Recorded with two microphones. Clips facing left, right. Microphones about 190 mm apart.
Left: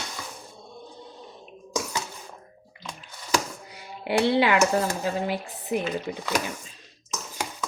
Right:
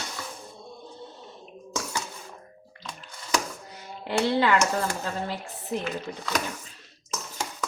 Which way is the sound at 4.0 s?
15° left (ahead or behind).